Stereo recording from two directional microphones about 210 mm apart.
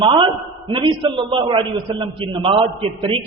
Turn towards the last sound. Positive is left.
turn(degrees=-25)  # may be behind; listen again after turning